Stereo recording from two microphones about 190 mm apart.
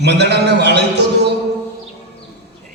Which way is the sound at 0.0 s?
60° right (ahead or behind).